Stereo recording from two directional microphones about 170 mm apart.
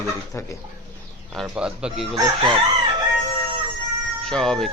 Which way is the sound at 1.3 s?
Centre (ahead or behind).